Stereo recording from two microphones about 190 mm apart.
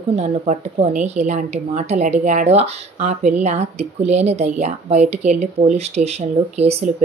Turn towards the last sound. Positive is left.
turn(degrees=-35)  # may be behind; listen again after turning